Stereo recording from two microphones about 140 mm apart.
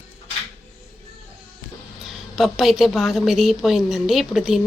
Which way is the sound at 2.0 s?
Centre (ahead or behind).